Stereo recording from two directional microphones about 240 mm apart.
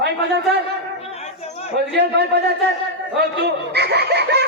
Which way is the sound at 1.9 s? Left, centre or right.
Right.